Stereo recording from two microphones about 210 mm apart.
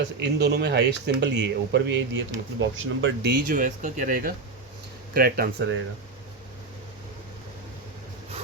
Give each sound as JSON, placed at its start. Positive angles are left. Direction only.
{"t": 0.0, "sound": "speech", "side_deg": -50}
{"t": 3.5, "sound": "speech", "side_deg": -40}